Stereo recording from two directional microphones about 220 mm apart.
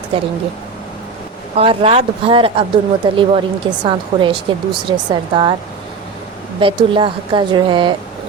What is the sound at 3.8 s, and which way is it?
Speech, 20° right (ahead or behind).